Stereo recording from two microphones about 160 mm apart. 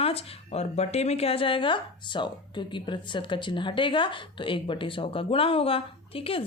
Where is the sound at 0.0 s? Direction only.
35° left (ahead or behind).